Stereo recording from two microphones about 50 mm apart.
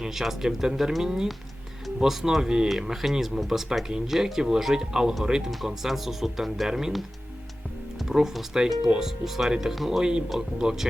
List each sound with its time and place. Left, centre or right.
0.0 s speech: centre
8.0 s speech: centre
10.0 s speech: centre